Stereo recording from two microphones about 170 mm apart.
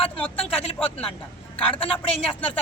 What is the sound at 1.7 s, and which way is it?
Speech, 30° left (ahead or behind).